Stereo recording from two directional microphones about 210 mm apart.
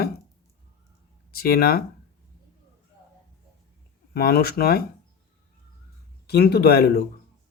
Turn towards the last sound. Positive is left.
turn(degrees=50)  # may be behind; listen again after turning